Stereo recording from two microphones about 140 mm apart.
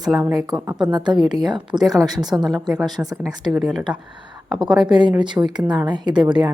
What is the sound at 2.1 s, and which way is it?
Speech, 30° right (ahead or behind).